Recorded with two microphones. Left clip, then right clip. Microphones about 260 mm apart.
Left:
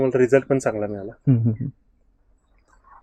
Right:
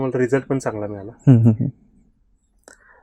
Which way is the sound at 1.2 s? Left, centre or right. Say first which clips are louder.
Right 7 dB; right.